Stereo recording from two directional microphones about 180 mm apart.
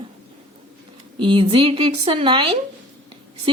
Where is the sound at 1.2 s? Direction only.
25° right (ahead or behind).